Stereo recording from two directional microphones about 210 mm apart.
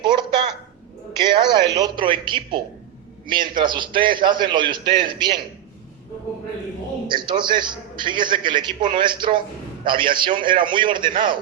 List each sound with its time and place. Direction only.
0.0 s a sound: 20° right (ahead or behind)
1.2 s a man's voice: 20° right (ahead or behind)
7.1 s a man's voice: 20° right (ahead or behind)